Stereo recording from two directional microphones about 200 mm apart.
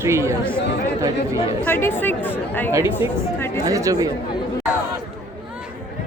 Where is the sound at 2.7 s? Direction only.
15° right (ahead or behind).